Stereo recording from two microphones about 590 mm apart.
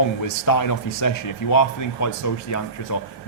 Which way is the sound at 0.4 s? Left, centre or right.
Left.